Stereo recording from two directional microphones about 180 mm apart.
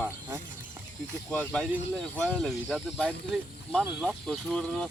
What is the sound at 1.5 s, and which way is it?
Speech, 5° left (ahead or behind).